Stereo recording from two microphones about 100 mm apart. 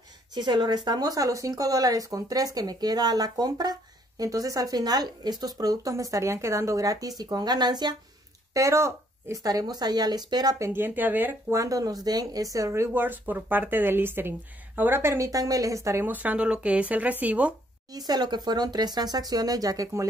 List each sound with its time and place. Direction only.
0.3 s speech: 45° right (ahead or behind)
8.5 s speech: 30° right (ahead or behind)
10.7 s speech: 20° right (ahead or behind)
11.5 s speech: 35° right (ahead or behind)
16.1 s speech: 15° right (ahead or behind)
17.9 s speech: 40° right (ahead or behind)